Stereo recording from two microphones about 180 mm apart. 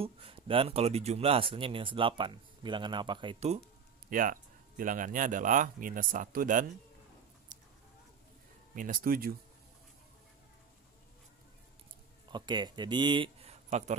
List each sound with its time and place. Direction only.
0.0 s speech: 30° right (ahead or behind)
4.1 s speech: 50° right (ahead or behind)
8.7 s speech: 50° right (ahead or behind)
12.3 s speech: 25° right (ahead or behind); by 13.9 s 40° right (ahead or behind)